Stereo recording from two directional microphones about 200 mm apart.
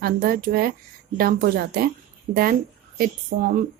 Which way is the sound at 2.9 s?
45° right (ahead or behind).